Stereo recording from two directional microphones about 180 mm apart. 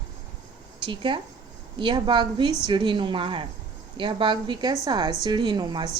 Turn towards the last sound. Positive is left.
turn(degrees=-25)  # may be behind; listen again after turning